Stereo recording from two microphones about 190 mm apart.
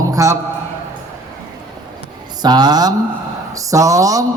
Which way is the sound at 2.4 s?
20° right (ahead or behind).